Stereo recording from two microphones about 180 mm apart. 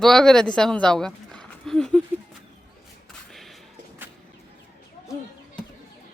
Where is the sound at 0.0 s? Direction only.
Centre (ahead or behind).